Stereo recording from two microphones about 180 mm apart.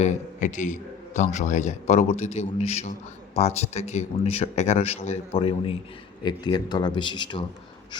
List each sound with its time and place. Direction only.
0.0 s a man's voice: 45° left (ahead or behind); by 7.4 s 25° left (ahead or behind)